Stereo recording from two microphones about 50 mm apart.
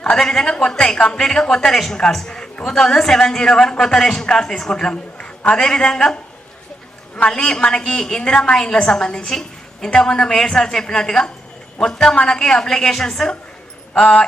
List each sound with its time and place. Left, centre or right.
0.0 s speech: centre
7.3 s speech: centre
14.0 s a sound: left